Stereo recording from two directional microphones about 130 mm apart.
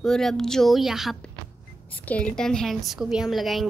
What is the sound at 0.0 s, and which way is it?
A woman's voice, 5° left (ahead or behind).